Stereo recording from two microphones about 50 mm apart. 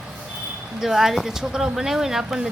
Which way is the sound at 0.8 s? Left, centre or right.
Centre.